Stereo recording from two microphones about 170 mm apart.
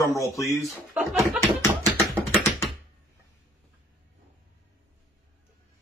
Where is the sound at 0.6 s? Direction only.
Centre (ahead or behind).